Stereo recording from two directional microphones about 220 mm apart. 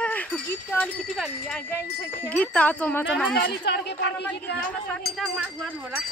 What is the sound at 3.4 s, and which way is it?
Speech, 50° left (ahead or behind).